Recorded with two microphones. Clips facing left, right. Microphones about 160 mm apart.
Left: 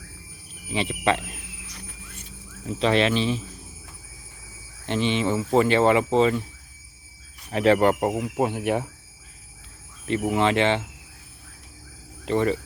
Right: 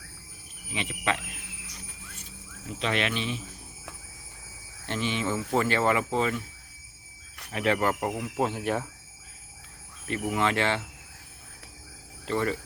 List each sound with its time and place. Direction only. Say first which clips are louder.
0.7 s speech: left 7 dB; 30° left (ahead or behind)
2.7 s speech: left 8 dB; 30° left (ahead or behind)
4.9 s speech: left 6 dB; 25° left (ahead or behind)
7.5 s speech: left 7 dB; 30° left (ahead or behind)
8.4 s speech: left 3 dB; 15° left (ahead or behind)
10.1 s speech: left 5 dB; 25° left (ahead or behind)
12.2 s speech: left 5 dB; 20° left (ahead or behind)